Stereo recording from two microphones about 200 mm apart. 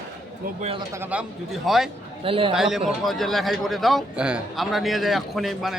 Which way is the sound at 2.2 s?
25° right (ahead or behind).